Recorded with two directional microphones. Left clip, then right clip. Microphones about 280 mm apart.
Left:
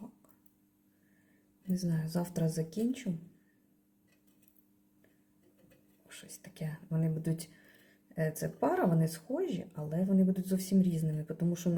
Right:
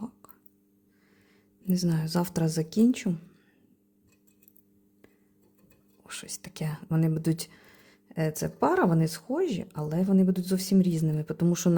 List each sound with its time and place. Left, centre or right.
1.7 s speech: right
6.1 s speech: right